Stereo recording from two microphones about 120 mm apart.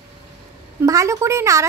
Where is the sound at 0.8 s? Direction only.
25° right (ahead or behind).